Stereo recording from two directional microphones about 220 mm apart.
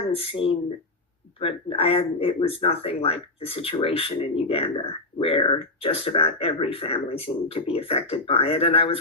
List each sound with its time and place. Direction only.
0.1 s speech: 25° left (ahead or behind)